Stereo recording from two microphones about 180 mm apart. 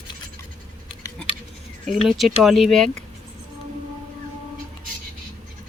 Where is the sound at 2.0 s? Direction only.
Centre (ahead or behind).